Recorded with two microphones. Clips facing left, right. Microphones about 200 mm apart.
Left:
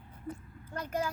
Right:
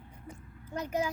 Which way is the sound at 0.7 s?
10° right (ahead or behind).